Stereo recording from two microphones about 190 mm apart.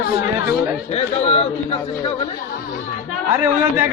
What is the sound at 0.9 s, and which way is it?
A man's voice, 35° left (ahead or behind).